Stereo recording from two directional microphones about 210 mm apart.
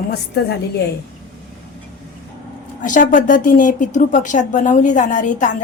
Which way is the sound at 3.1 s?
40° left (ahead or behind).